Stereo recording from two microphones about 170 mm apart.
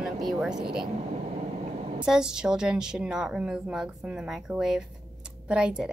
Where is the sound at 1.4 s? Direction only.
40° right (ahead or behind).